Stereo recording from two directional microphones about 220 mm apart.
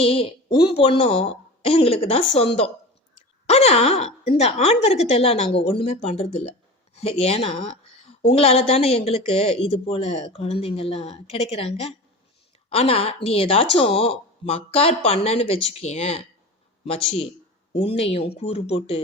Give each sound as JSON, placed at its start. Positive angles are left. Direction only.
{"t": 0.0, "sound": "a woman's voice", "side_deg": 25}
{"t": 17.7, "sound": "a woman's voice", "side_deg": 25}